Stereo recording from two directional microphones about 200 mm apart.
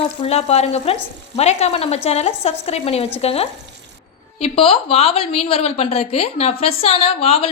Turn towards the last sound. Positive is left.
turn(degrees=30)  # may be behind; listen again after turning